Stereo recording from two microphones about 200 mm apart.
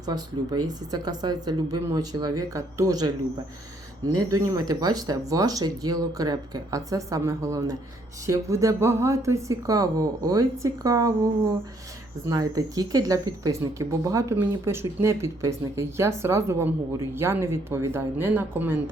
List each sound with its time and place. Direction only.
0.0 s speech: 20° right (ahead or behind)